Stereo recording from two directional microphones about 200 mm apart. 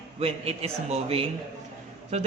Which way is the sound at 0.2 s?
30° right (ahead or behind).